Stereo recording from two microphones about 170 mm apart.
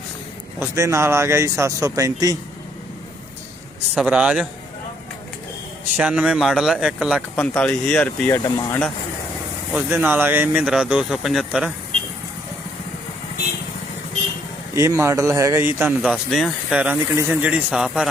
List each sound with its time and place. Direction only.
0.6 s speech: 15° right (ahead or behind)
3.9 s speech: 5° right (ahead or behind)
6.0 s speech: 5° right (ahead or behind)
7.3 s speech: 10° left (ahead or behind)
8.4 s speech: 20° left (ahead or behind)
9.9 s speech: 10° right (ahead or behind)
14.8 s speech: 15° right (ahead or behind)